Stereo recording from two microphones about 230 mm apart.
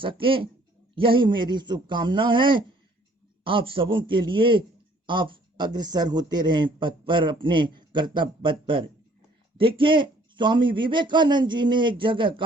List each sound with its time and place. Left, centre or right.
0.0 s a man's voice: right